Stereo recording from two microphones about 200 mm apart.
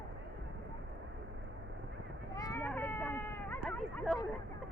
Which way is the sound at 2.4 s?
15° left (ahead or behind).